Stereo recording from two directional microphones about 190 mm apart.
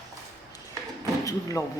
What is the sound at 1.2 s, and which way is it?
Speech, 15° left (ahead or behind).